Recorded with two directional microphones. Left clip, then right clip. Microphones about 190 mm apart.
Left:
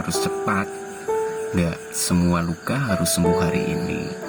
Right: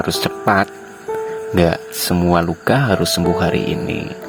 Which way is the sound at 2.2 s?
50° right (ahead or behind).